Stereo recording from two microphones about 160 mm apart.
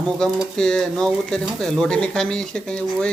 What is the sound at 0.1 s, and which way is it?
Speech, 5° left (ahead or behind).